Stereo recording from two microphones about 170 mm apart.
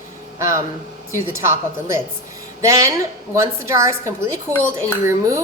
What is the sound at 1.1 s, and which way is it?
A woman's voice, 15° right (ahead or behind).